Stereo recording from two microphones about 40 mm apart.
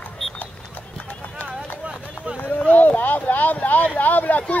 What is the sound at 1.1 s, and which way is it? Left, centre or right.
Clip-clop, left.